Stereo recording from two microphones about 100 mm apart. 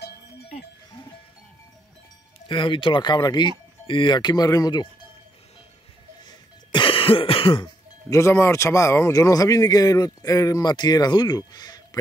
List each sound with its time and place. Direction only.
2.4 s speech: 55° left (ahead or behind); by 4.8 s 40° left (ahead or behind)
6.2 s throat clearing: 55° left (ahead or behind)
8.1 s a man's voice: 25° left (ahead or behind)